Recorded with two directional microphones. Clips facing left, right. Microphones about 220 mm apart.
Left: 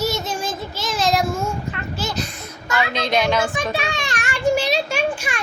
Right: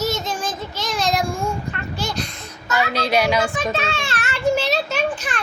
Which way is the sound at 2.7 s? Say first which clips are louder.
Right 1 dB; 10° right (ahead or behind).